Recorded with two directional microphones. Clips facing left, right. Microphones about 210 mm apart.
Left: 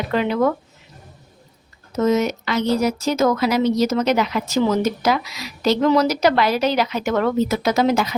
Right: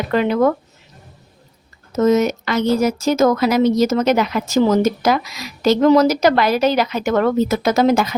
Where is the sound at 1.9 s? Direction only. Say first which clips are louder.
Right 3 dB; 45° right (ahead or behind).